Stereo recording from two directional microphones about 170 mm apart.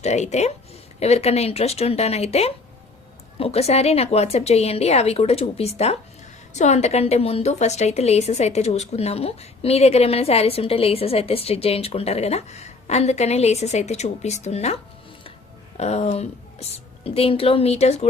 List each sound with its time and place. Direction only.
0.0 s a woman's voice: 40° left (ahead or behind)
15.8 s a woman's voice: 40° left (ahead or behind)